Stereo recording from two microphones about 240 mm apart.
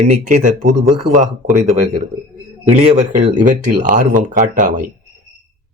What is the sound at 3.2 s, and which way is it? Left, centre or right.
Speech, right.